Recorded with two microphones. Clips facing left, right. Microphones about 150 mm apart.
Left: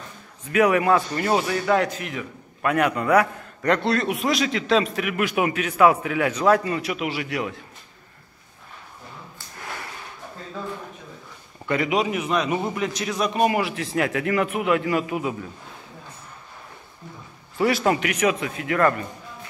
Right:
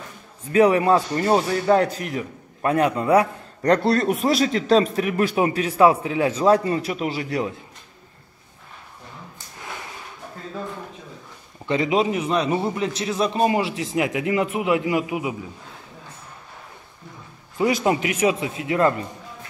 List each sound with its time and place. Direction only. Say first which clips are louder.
0.5 s speech: right 2 dB; 30° right (ahead or behind)
11.6 s a man's voice: right 2 dB; 25° right (ahead or behind)
17.6 s a man's voice: right 1 dB; 20° right (ahead or behind)